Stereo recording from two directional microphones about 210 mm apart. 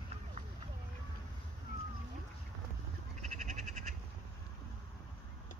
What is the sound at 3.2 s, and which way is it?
Frog, 35° right (ahead or behind).